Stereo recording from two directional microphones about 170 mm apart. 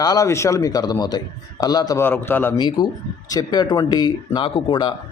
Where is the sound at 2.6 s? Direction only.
25° left (ahead or behind).